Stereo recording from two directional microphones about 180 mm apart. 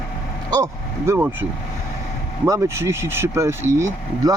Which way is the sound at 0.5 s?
15° right (ahead or behind).